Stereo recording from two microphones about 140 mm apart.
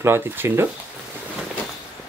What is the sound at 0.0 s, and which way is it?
Speech, 20° right (ahead or behind).